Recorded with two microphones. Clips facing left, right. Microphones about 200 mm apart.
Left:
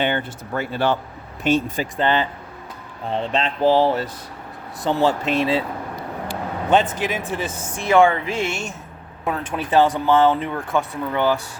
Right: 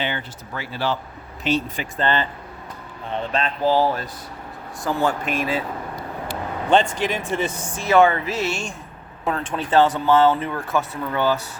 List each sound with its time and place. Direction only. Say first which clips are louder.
0.0 s speech: left 5 dB; 55° left (ahead or behind)
2.0 s speech: left 2 dB; 15° left (ahead or behind)
3.1 s speech: left 2 dB; 30° left (ahead or behind)
7.0 s speech: right 1 dB; 5° left (ahead or behind)